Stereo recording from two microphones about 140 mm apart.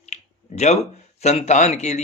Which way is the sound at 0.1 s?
50° left (ahead or behind).